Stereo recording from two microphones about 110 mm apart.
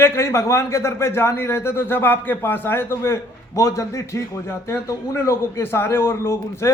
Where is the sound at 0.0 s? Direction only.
25° left (ahead or behind).